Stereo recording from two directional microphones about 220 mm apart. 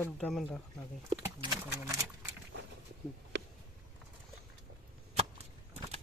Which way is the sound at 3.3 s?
55° right (ahead or behind).